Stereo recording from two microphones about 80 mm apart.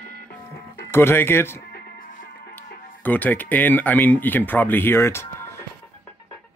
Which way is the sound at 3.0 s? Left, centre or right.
Left.